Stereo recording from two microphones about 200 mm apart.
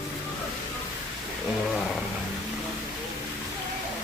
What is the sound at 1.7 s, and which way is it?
Roaring cats, centre (ahead or behind).